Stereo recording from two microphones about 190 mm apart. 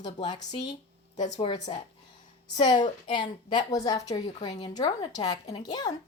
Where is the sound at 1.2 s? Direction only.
40° left (ahead or behind).